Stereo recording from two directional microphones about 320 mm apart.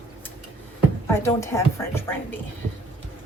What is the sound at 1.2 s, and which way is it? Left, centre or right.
Speech, centre.